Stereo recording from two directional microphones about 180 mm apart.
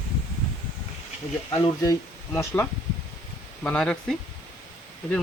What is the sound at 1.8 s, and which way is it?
Speech, 15° left (ahead or behind).